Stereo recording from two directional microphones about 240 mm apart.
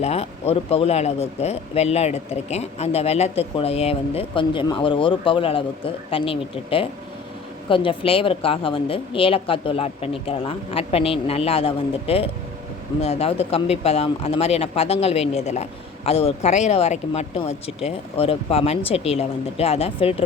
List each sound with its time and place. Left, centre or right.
0.0 s speech: left